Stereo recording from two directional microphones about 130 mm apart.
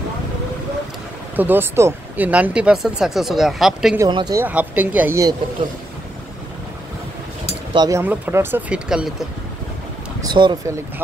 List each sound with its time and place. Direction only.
1.3 s speech: 15° right (ahead or behind)
4.1 s speech: 35° right (ahead or behind)
4.4 s speech: 10° right (ahead or behind)
7.7 s speech: 30° right (ahead or behind)
8.0 s speech: 15° right (ahead or behind)
10.2 s speech: 35° right (ahead or behind)